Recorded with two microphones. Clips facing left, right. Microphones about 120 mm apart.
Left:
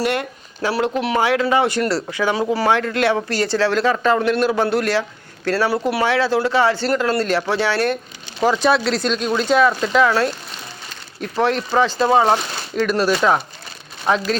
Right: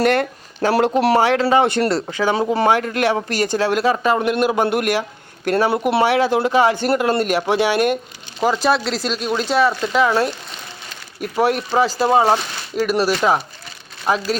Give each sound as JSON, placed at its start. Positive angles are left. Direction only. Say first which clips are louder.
{"t": 0.1, "sound": "speech", "louder": "right 4 dB", "side_deg": -40}
{"t": 8.4, "sound": "speech", "louder": "left 1 dB", "side_deg": 0}